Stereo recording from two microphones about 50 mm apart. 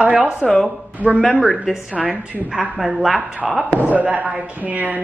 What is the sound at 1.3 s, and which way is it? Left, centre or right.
A woman's voice, centre.